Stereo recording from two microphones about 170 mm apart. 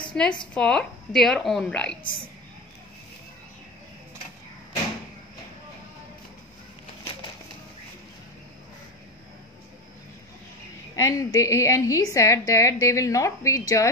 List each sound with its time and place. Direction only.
0.1 s a woman's voice: 5° left (ahead or behind)
11.0 s a woman's voice: 20° left (ahead or behind)